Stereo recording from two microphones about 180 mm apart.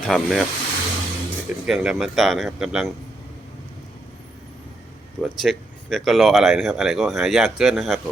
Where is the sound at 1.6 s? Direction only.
5° right (ahead or behind).